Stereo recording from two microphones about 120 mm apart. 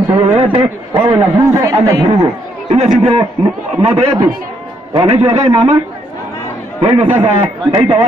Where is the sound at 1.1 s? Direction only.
25° right (ahead or behind).